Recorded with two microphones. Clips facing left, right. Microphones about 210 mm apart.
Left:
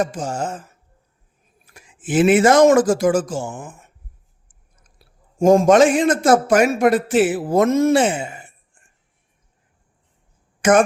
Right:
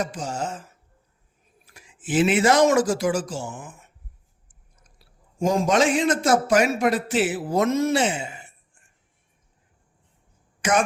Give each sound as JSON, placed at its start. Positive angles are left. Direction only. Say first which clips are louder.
{"t": 0.0, "sound": "a man's voice", "louder": "left 5 dB", "side_deg": 50}
{"t": 1.6, "sound": "speech", "louder": "left 4 dB", "side_deg": 50}
{"t": 4.9, "sound": "a man's voice", "louder": "left 6 dB", "side_deg": 50}
{"t": 10.6, "sound": "speech", "louder": "left 8 dB", "side_deg": 50}